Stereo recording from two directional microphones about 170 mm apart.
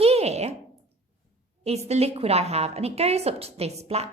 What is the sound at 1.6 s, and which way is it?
A woman's voice, 40° right (ahead or behind).